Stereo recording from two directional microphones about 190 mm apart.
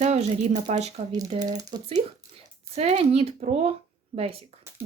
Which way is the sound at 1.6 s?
20° right (ahead or behind).